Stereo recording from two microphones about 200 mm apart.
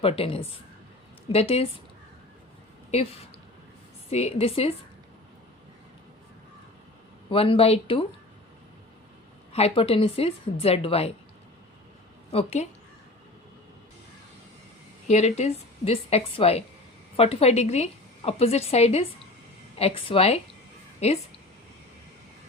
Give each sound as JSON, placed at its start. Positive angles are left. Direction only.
{"t": 0.0, "sound": "a woman's voice", "side_deg": 30}
{"t": 2.9, "sound": "a woman's voice", "side_deg": 30}
{"t": 7.3, "sound": "a woman's voice", "side_deg": 25}
{"t": 9.5, "sound": "a woman's voice", "side_deg": 30}
{"t": 12.3, "sound": "a woman's voice", "side_deg": 30}
{"t": 15.0, "sound": "a woman's voice", "side_deg": 35}